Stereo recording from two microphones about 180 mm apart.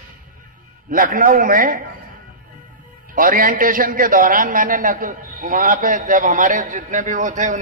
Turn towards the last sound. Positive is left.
turn(degrees=-45)  # may be behind; listen again after turning